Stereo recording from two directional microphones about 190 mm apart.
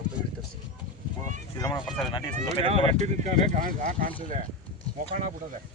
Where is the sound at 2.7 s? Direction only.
35° right (ahead or behind).